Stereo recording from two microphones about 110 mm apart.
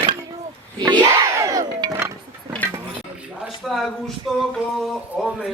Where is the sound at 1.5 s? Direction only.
35° right (ahead or behind).